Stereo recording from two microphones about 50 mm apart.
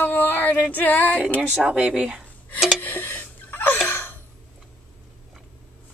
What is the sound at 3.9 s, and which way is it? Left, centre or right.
Gasp, left.